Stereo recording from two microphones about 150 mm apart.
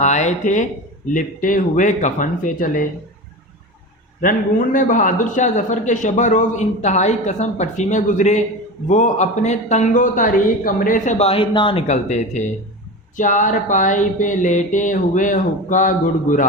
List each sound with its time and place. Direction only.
0.0 s a man's voice: 50° left (ahead or behind)
4.2 s a man's voice: 65° left (ahead or behind); by 11.8 s 35° left (ahead or behind)
11.9 s a man's voice: 50° left (ahead or behind)